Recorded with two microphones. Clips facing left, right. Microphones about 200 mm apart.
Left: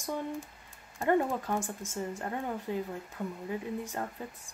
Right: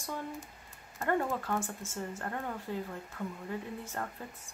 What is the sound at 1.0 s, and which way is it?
Speech, 15° left (ahead or behind).